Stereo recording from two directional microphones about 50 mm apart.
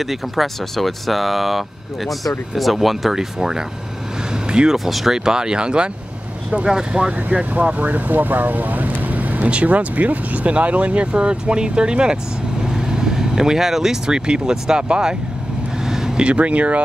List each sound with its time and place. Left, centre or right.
0.0 s speech: centre
4.3 s a sound: centre
4.7 s speech: centre
7.2 s speech: right
15.8 s vehicle: centre
16.3 s speech: right